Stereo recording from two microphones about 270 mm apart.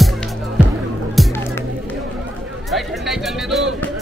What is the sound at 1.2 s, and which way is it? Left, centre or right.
Music, centre.